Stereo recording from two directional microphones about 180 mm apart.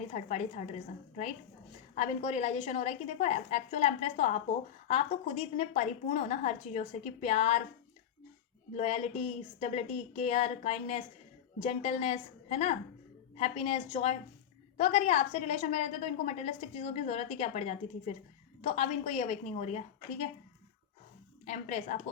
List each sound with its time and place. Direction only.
0.1 s a woman's voice: 40° left (ahead or behind)
5.5 s a woman's voice: 40° left (ahead or behind)
8.7 s a woman's voice: 40° left (ahead or behind)
21.4 s a woman's voice: 40° left (ahead or behind)